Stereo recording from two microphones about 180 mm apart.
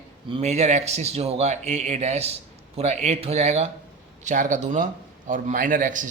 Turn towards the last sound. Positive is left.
turn(degrees=-45)  # may be behind; listen again after turning